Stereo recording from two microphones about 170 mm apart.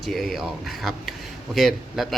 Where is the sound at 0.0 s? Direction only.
Centre (ahead or behind).